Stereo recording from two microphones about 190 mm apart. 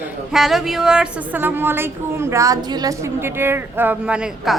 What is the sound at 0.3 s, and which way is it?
A woman's voice, centre (ahead or behind).